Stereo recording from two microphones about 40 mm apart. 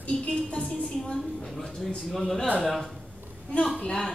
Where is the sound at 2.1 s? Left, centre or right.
Centre.